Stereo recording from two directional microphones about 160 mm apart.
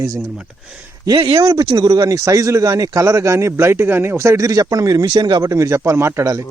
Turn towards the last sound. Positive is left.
turn(degrees=-20)  # may be behind; listen again after turning